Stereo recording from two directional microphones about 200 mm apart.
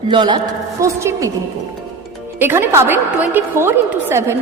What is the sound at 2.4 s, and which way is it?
A woman's voice, 10° right (ahead or behind).